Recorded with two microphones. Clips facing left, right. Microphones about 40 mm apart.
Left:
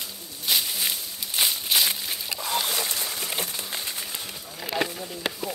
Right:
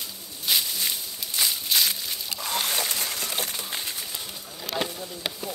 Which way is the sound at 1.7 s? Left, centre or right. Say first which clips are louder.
Left 1 dB; centre.